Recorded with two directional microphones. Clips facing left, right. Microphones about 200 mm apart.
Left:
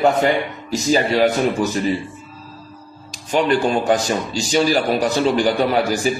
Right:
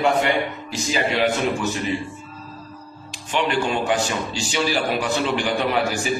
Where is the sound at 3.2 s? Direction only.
40° left (ahead or behind).